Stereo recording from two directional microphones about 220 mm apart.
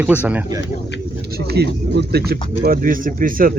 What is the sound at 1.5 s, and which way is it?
Speech, 50° right (ahead or behind).